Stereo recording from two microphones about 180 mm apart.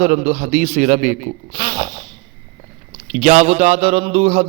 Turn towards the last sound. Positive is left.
turn(degrees=-35)  # may be behind; listen again after turning